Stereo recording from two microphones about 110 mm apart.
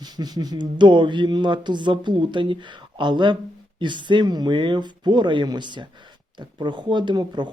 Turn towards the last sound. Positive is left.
turn(degrees=-40)  # may be behind; listen again after turning